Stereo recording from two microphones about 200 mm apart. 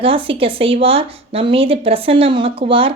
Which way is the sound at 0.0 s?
25° right (ahead or behind).